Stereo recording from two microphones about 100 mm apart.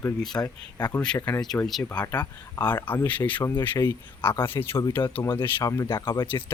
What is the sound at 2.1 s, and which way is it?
Speech, 40° left (ahead or behind).